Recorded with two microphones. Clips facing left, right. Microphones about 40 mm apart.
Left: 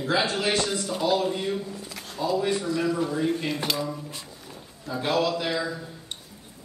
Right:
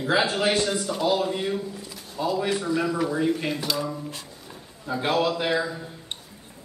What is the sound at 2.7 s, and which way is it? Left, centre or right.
Speech, right.